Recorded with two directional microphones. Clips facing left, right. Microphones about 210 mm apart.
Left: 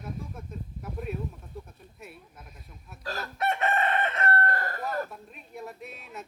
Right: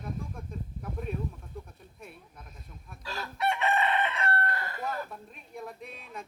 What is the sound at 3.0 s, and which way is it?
Chicken, 45° left (ahead or behind).